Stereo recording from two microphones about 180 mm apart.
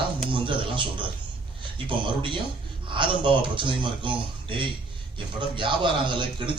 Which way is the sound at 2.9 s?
25° right (ahead or behind).